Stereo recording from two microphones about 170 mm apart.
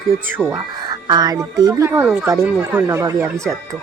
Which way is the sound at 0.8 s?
25° right (ahead or behind).